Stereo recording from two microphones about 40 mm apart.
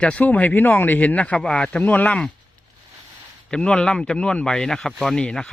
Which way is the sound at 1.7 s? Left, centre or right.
Left.